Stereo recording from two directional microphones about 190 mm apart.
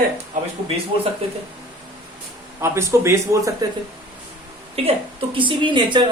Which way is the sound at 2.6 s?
15° right (ahead or behind).